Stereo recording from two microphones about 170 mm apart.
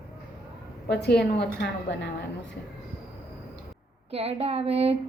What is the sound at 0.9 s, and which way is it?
A woman's voice, 75° left (ahead or behind).